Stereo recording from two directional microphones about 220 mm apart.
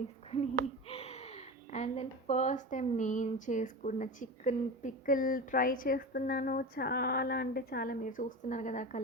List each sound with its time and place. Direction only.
0.9 s speech: 25° left (ahead or behind)